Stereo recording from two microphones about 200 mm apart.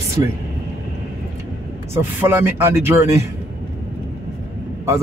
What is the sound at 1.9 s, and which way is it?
Speech, 10° right (ahead or behind).